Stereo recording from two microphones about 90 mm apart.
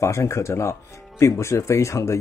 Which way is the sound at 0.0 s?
35° left (ahead or behind).